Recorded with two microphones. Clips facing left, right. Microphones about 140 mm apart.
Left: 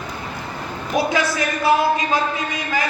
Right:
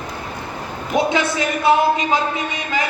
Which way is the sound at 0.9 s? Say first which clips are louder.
Right 2 dB; 20° right (ahead or behind).